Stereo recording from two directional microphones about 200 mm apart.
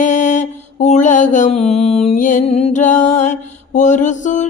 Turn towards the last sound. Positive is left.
turn(degrees=40)  # may be behind; listen again after turning